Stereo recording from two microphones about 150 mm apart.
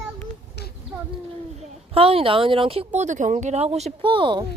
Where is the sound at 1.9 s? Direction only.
40° right (ahead or behind).